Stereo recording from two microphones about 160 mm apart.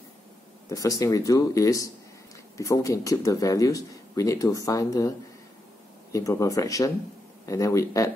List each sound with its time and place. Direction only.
0.7 s speech: 20° left (ahead or behind)
6.1 s speech: 20° left (ahead or behind)